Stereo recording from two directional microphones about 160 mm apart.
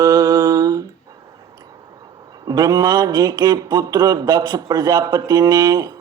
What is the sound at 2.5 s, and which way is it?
Speech, 25° right (ahead or behind).